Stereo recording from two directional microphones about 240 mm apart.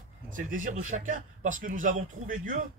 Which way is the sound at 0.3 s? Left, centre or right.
Right.